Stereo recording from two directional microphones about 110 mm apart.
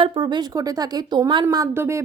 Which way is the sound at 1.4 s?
30° right (ahead or behind).